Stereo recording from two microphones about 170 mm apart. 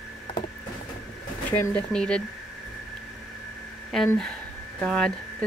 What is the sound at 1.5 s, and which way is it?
Speech, 15° left (ahead or behind).